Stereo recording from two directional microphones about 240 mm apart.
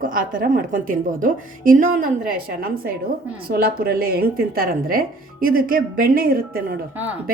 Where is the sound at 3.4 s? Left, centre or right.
Right.